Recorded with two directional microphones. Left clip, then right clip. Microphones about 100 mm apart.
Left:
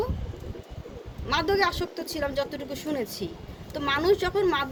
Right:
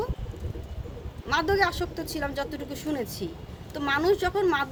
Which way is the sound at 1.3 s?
45° right (ahead or behind).